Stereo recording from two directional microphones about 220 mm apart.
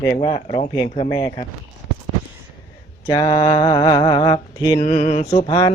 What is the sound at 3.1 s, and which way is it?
Speech, 20° left (ahead or behind).